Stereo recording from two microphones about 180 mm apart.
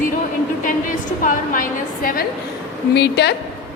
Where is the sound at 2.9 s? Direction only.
70° left (ahead or behind).